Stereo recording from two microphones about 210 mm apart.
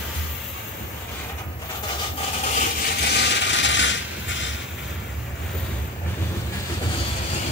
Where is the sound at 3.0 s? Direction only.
50° left (ahead or behind).